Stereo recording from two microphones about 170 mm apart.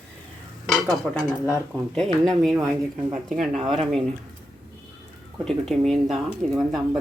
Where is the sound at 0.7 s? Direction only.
5° left (ahead or behind).